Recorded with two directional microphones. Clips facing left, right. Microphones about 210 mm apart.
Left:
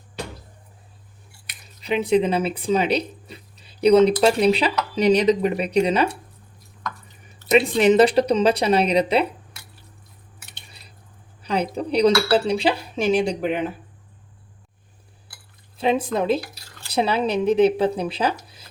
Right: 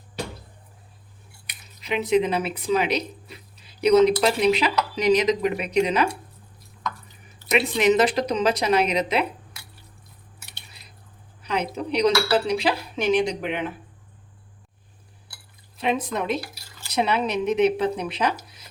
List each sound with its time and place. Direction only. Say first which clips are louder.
1.8 s speech: left 2 dB; 35° left (ahead or behind)
4.9 s cutlery: left 3 dB; 35° left (ahead or behind)
7.5 s cutlery: left 4 dB; 35° left (ahead or behind)
11.4 s cutlery: left 3 dB; 35° left (ahead or behind)
15.8 s speech: left 4 dB; 30° left (ahead or behind)
16.6 s drip: left 1 dB; 10° right (ahead or behind)
16.9 s cutlery: left 2 dB; 30° left (ahead or behind)
18.4 s a sound: left 1 dB; 30° left (ahead or behind)